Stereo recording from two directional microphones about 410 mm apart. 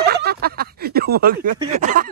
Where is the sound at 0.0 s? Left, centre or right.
Right.